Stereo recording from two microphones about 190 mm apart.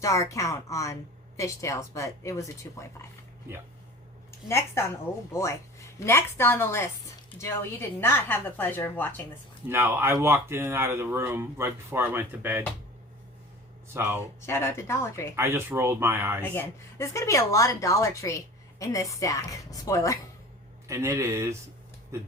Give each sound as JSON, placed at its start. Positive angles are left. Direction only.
{"t": 0.0, "sound": "speech", "side_deg": 15}
{"t": 4.4, "sound": "speech", "side_deg": 15}
{"t": 9.6, "sound": "speech", "side_deg": -10}
{"t": 13.8, "sound": "speech", "side_deg": -15}
{"t": 14.4, "sound": "speech", "side_deg": 15}
{"t": 15.4, "sound": "speech", "side_deg": -10}
{"t": 16.4, "sound": "speech", "side_deg": 15}
{"t": 20.8, "sound": "speech", "side_deg": -15}